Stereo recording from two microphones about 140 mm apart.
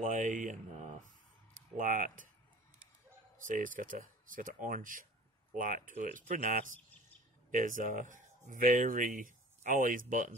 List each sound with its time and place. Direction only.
0.0 s speech: 70° right (ahead or behind)
1.8 s speech: 70° right (ahead or behind)
3.4 s speech: 70° right (ahead or behind)